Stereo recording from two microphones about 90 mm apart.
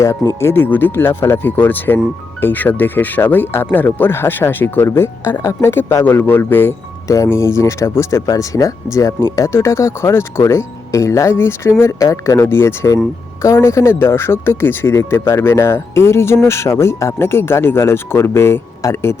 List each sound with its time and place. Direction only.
0.0 s speech: 35° left (ahead or behind)